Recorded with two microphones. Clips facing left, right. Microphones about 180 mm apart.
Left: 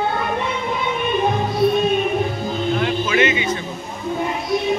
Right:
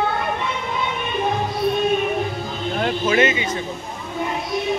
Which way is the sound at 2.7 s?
40° right (ahead or behind).